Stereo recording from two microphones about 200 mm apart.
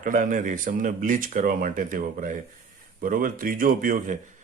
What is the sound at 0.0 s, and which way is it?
Speech, 40° right (ahead or behind).